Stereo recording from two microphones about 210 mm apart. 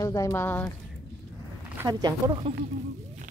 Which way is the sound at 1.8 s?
20° right (ahead or behind).